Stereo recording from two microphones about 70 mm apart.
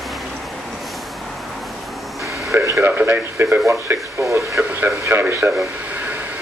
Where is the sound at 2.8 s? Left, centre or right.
Right.